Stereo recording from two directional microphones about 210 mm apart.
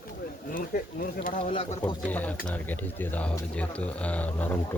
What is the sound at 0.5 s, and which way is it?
Speech, 45° left (ahead or behind).